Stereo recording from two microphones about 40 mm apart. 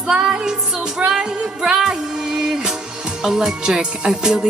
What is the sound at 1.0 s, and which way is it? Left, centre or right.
Music, right.